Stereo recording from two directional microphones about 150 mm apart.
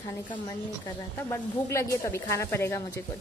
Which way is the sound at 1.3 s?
20° left (ahead or behind).